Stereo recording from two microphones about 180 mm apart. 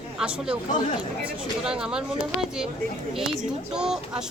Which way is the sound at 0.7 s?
45° left (ahead or behind).